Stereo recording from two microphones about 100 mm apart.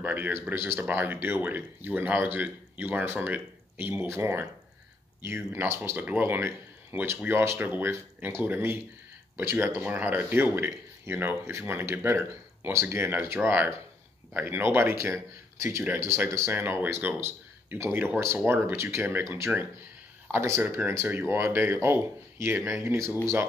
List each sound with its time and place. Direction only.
0.0 s speech: 20° right (ahead or behind)